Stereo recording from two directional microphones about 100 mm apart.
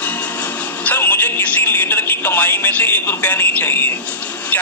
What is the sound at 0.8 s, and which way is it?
A man's voice, 20° left (ahead or behind).